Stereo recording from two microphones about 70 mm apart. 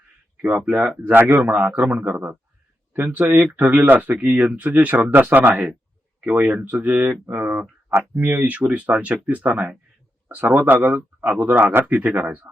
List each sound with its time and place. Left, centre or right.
0.4 s speech: centre